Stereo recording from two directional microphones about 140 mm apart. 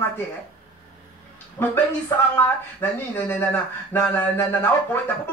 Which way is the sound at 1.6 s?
15° left (ahead or behind).